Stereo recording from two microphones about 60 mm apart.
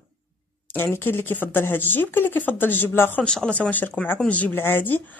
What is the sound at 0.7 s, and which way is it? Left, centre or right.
Speech, left.